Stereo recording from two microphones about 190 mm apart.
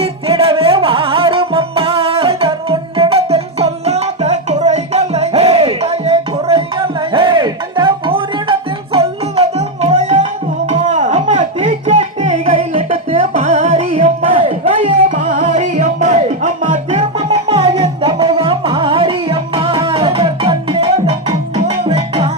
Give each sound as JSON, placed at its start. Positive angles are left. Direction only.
{"t": 0.0, "sound": "music", "side_deg": -30}
{"t": 10.7, "sound": "a sound", "side_deg": -40}
{"t": 15.3, "sound": "music", "side_deg": -40}